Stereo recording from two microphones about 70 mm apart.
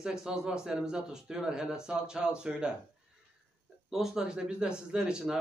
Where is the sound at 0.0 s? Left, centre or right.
Centre.